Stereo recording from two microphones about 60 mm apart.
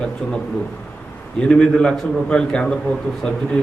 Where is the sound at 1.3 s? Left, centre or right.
Centre.